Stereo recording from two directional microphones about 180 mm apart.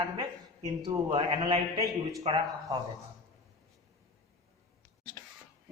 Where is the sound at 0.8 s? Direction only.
25° right (ahead or behind).